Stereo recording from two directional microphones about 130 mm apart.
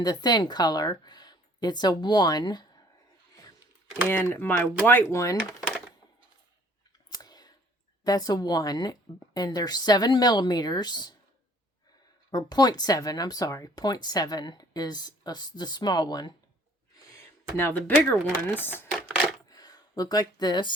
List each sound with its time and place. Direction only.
0.0 s speech: 30° left (ahead or behind)
4.1 s speech: 15° left (ahead or behind)
7.1 s clicking: 30° left (ahead or behind)
8.0 s speech: 30° left (ahead or behind)
12.3 s speech: 30° left (ahead or behind)
17.6 s speech: 15° left (ahead or behind)
18.9 s typewriter: 5° right (ahead or behind)
19.5 s a sound: 30° left (ahead or behind)